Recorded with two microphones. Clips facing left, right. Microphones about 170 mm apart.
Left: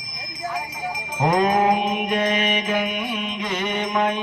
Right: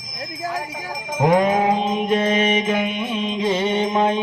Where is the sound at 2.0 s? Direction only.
25° right (ahead or behind).